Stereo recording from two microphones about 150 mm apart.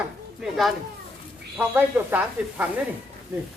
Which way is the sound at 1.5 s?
10° right (ahead or behind).